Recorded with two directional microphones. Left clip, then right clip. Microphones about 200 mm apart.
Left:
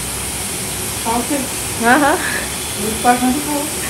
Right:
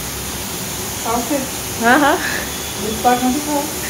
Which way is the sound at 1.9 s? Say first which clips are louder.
Even; centre (ahead or behind).